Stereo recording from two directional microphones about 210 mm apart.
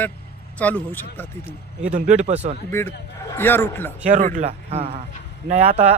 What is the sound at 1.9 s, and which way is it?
Speech, 35° right (ahead or behind).